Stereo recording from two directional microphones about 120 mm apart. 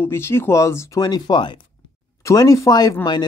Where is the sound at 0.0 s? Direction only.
20° left (ahead or behind); by 1.7 s 40° left (ahead or behind).